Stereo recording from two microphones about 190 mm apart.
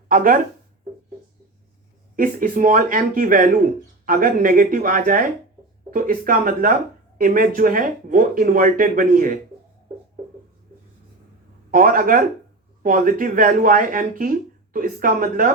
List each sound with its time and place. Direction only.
0.1 s speech: 50° right (ahead or behind)
2.1 s speech: 45° right (ahead or behind)
11.7 s speech: 50° right (ahead or behind)